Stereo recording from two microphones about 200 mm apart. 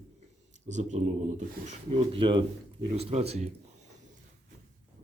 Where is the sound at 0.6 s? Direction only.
35° right (ahead or behind).